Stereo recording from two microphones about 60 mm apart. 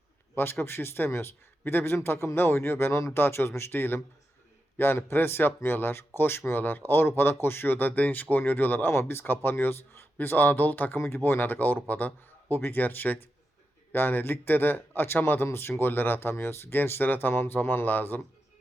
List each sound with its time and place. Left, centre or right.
0.6 s a man's voice: left